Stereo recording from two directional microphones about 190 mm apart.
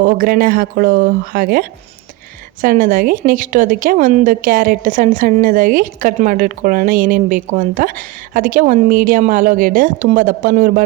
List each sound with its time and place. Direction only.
0.0 s a woman's voice: 50° right (ahead or behind)